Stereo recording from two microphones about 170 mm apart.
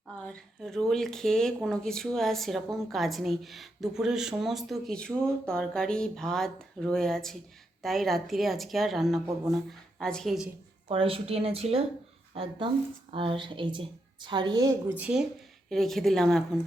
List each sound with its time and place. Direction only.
0.2 s a woman's voice: 5° left (ahead or behind)
10.8 s a woman's voice: 30° right (ahead or behind)
14.9 s a woman's voice: 5° right (ahead or behind)